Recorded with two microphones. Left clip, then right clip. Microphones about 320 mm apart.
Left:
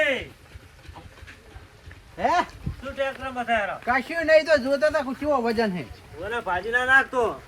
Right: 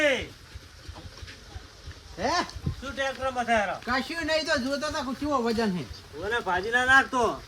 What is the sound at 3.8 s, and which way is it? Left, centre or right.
Speech, centre.